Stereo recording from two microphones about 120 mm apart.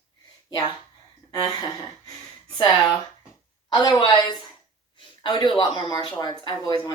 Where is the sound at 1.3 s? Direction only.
30° left (ahead or behind).